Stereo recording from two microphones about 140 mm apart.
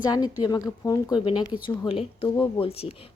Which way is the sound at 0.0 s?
30° left (ahead or behind).